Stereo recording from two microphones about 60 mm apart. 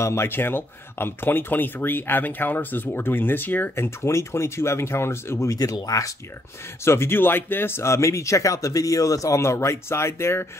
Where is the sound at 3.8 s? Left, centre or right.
Left.